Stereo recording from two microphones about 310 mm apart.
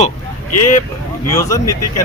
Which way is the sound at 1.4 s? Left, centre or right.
Centre.